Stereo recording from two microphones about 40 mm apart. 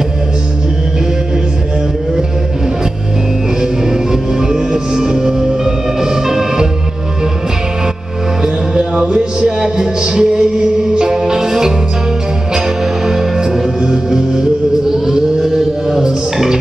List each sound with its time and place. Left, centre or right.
3.6 s music: centre
8.4 s music: centre